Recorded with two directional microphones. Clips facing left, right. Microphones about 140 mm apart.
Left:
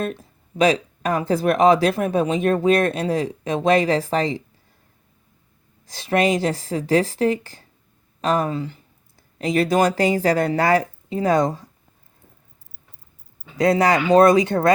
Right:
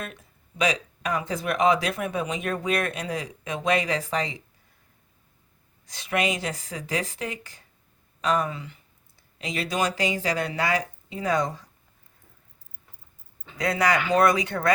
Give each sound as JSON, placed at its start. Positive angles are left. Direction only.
{"t": 0.0, "sound": "a sound", "side_deg": 35}
{"t": 1.4, "sound": "speech", "side_deg": 35}
{"t": 5.9, "sound": "speech", "side_deg": 35}
{"t": 9.4, "sound": "speech", "side_deg": 45}
{"t": 13.6, "sound": "speech", "side_deg": 25}